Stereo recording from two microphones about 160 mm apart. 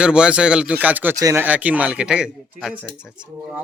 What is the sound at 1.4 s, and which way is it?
Chicken, 10° right (ahead or behind).